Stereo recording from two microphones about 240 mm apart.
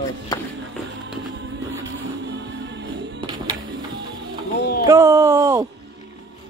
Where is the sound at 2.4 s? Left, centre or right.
Right.